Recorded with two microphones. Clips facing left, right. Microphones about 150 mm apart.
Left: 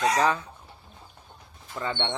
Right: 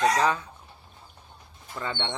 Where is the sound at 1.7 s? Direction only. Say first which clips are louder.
Left 2 dB; 30° left (ahead or behind).